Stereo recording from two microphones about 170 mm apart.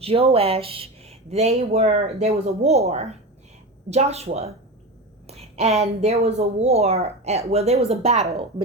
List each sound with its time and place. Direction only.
0.0 s speech: 35° right (ahead or behind)